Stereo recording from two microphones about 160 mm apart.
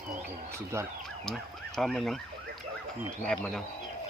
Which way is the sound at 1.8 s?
Centre (ahead or behind).